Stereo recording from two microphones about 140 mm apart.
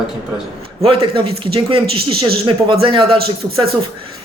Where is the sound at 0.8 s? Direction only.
40° right (ahead or behind).